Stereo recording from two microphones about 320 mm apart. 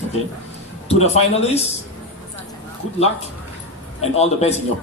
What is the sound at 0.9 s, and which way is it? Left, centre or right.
Speech, centre.